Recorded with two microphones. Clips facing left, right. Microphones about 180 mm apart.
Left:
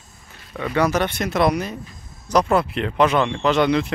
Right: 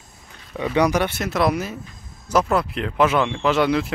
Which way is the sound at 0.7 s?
15° right (ahead or behind).